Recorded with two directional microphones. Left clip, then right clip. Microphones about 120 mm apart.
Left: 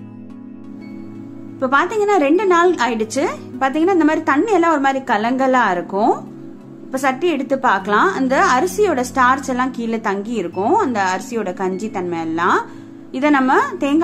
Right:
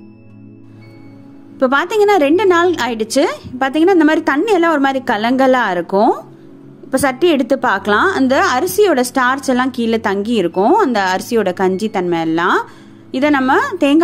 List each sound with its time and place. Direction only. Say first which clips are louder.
1.6 s a woman's voice: right 3 dB; 50° right (ahead or behind)